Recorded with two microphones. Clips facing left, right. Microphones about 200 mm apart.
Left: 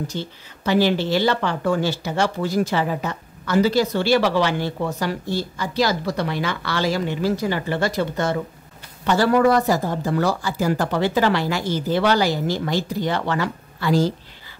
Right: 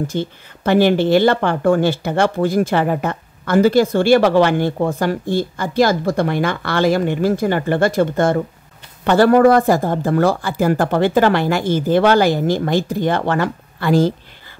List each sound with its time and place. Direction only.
0.0 s speech: 55° right (ahead or behind)